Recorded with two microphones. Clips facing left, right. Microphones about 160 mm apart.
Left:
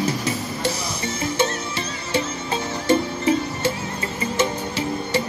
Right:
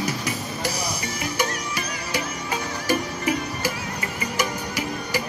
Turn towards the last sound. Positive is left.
turn(degrees=25)  # may be behind; listen again after turning